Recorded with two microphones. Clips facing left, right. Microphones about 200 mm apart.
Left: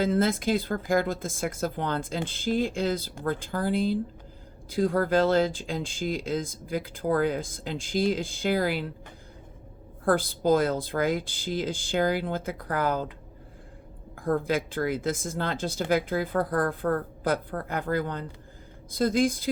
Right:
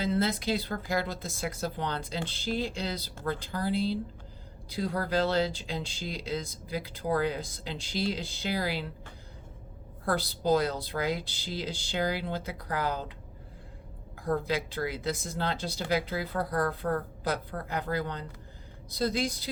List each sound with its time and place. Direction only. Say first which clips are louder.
0.0 s speech: left 4 dB; 50° left (ahead or behind)
10.1 s speech: left 4 dB; 50° left (ahead or behind)
14.2 s speech: left 4 dB; 50° left (ahead or behind)